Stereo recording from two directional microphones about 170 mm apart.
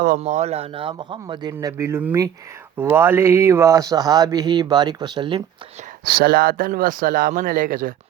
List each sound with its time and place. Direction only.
0.2 s speech: 40° right (ahead or behind)
1.5 s speech: 15° right (ahead or behind)
6.1 s speech: 60° right (ahead or behind)